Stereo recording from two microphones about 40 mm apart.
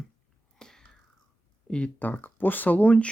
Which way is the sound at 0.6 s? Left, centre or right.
Centre.